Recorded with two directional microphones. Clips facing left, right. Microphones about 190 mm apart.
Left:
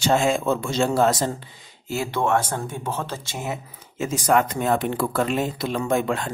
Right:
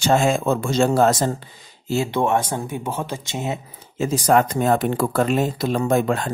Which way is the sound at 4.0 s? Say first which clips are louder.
Right 3 dB; 35° right (ahead or behind).